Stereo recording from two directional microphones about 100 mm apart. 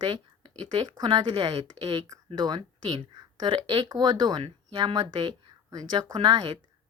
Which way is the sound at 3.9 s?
40° right (ahead or behind).